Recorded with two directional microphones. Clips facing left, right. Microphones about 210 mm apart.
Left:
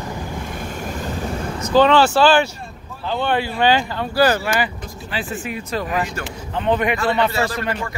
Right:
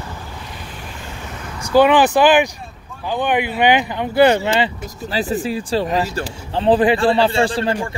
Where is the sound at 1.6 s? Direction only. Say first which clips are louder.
Right 2 dB; 10° right (ahead or behind).